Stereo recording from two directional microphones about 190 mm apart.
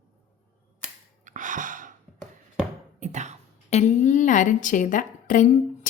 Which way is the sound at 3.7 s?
40° left (ahead or behind).